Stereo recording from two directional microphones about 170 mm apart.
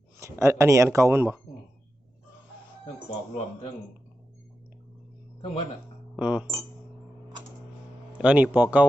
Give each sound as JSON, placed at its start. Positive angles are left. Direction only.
{"t": 0.2, "sound": "speech", "side_deg": -15}
{"t": 6.1, "sound": "speech", "side_deg": -5}
{"t": 8.2, "sound": "speech", "side_deg": -10}